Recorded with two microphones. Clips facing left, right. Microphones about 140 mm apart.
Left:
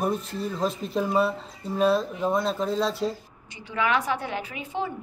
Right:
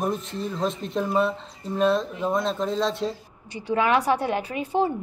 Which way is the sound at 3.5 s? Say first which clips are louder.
Right 4 dB; 35° right (ahead or behind).